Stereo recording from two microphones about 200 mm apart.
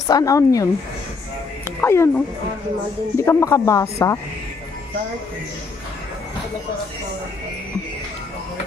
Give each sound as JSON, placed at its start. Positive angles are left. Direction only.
{"t": 0.1, "sound": "speech", "side_deg": 15}
{"t": 1.8, "sound": "speech", "side_deg": 10}